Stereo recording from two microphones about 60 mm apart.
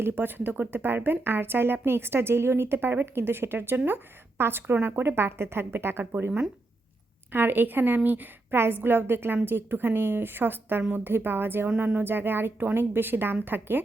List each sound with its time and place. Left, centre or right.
0.0 s speech: right
4.6 s speech: right